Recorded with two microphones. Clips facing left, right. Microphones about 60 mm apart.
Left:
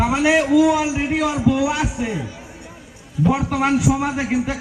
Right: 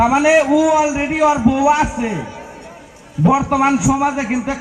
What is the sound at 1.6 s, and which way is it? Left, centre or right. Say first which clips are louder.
Speech: right 7 dB; right.